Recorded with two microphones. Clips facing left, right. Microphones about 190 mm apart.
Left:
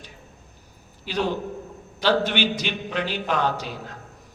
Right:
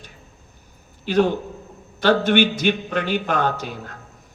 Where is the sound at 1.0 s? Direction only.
50° right (ahead or behind).